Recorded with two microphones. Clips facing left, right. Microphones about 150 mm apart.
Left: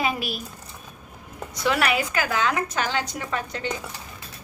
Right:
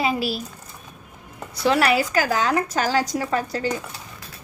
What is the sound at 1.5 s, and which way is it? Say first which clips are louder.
A woman's voice: right 4 dB; 30° right (ahead or behind).